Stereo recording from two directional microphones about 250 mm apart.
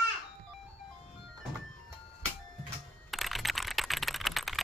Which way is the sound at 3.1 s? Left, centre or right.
Centre.